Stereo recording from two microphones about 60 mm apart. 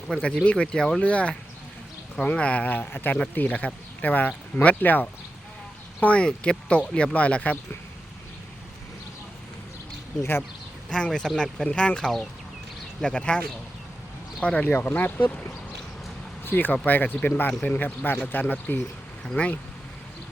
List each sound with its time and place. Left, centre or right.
0.4 s speech: centre
10.8 s speech: centre
14.4 s speech: left
14.7 s speech: left
14.9 s speech: left
16.4 s speech: left